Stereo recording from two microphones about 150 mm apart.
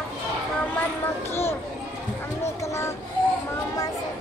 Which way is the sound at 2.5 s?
20° left (ahead or behind).